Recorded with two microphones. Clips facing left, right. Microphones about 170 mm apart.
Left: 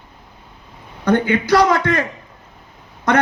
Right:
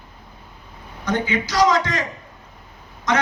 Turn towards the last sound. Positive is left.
turn(degrees=60)  # may be behind; listen again after turning